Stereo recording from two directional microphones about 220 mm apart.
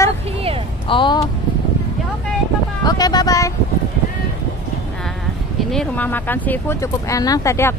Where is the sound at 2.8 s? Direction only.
15° left (ahead or behind).